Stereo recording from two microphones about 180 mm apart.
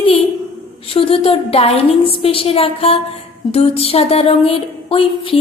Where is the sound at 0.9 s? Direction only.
30° left (ahead or behind).